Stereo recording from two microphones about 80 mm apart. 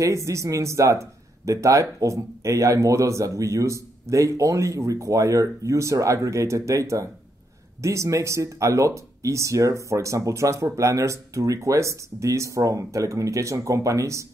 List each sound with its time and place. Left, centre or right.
0.0 s speech: right